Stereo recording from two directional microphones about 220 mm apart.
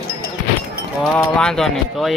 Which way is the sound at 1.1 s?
5° left (ahead or behind).